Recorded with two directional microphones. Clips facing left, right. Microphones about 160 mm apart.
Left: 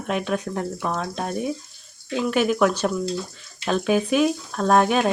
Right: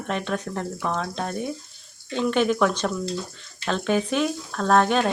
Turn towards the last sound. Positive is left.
turn(degrees=10)  # may be behind; listen again after turning